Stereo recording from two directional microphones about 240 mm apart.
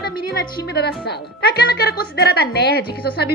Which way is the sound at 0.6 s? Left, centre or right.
Left.